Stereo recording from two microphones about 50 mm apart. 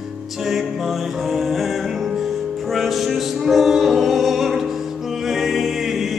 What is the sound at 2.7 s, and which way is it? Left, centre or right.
Music, centre.